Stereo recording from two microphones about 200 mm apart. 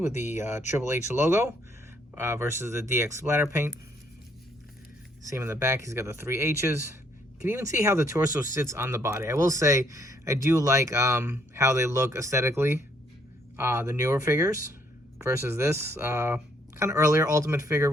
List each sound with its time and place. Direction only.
0.0 s speech: 10° right (ahead or behind)
5.3 s speech: 15° right (ahead or behind)